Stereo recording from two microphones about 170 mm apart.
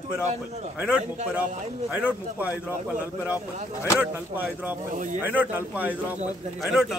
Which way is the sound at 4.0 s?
10° right (ahead or behind).